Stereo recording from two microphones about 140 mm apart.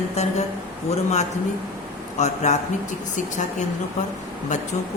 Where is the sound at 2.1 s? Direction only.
55° left (ahead or behind).